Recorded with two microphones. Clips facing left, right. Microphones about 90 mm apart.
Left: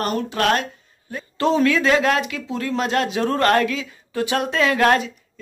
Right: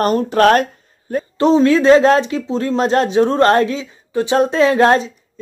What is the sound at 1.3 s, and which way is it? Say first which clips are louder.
Speech: right 6 dB; 20° right (ahead or behind).